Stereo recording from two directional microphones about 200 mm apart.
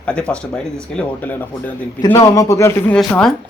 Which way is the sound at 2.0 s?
20° left (ahead or behind).